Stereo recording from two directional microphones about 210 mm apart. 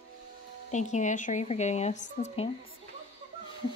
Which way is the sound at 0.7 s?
35° left (ahead or behind).